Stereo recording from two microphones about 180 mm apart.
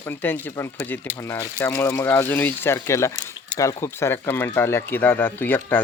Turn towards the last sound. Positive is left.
turn(degrees=10)  # may be behind; listen again after turning